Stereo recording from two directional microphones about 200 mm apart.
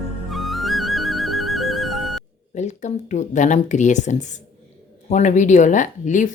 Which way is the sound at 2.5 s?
35° left (ahead or behind).